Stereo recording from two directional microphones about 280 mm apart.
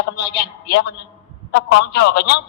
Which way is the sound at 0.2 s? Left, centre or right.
Left.